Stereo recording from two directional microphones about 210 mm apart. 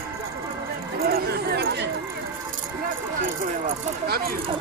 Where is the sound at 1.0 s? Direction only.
45° right (ahead or behind).